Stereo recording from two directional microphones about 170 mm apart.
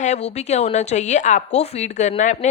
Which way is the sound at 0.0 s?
40° left (ahead or behind).